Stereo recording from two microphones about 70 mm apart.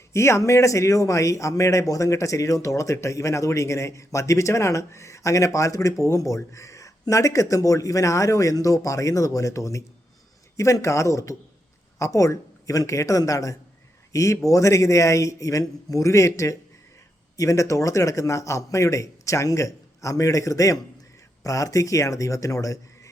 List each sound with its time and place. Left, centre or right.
0.1 s speech: left